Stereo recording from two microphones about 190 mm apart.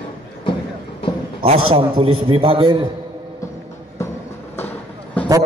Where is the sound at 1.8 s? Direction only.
30° right (ahead or behind).